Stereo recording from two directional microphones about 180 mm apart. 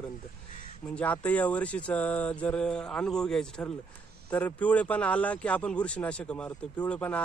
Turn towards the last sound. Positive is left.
turn(degrees=10)  # may be behind; listen again after turning